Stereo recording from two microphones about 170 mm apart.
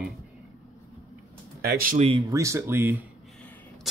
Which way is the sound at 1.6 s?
65° right (ahead or behind).